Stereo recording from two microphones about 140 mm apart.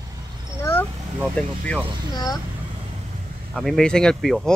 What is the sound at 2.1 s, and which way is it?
Speech, 30° left (ahead or behind).